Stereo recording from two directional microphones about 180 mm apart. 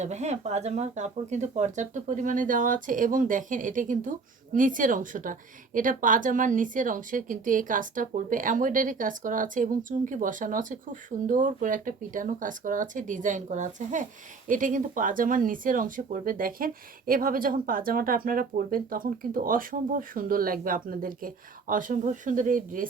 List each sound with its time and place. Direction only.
0.0 s speech: 40° right (ahead or behind)